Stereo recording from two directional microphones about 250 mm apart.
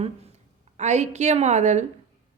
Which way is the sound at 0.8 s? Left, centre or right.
Right.